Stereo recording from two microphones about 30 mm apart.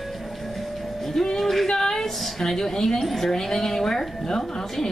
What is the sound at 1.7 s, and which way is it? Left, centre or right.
A woman's voice, centre.